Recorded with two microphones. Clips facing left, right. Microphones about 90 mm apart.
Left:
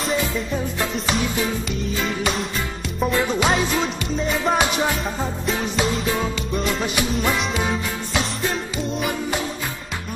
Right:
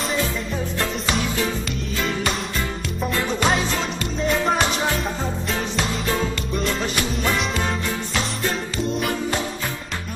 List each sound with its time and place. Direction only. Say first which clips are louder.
0.7 s music: right 1 dB; 5° left (ahead or behind)
6.5 s music: left 2 dB; 5° left (ahead or behind)